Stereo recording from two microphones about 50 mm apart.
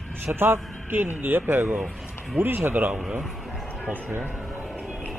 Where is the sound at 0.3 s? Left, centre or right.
Right.